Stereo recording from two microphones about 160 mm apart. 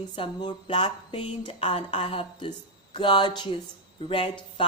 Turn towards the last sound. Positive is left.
turn(degrees=30)  # may be behind; listen again after turning